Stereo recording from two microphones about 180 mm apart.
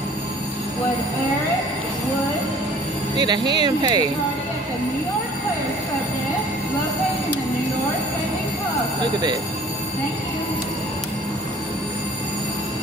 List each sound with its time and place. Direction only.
3.2 s speech: 25° right (ahead or behind)